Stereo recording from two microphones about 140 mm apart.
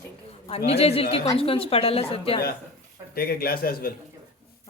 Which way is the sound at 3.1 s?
90° left.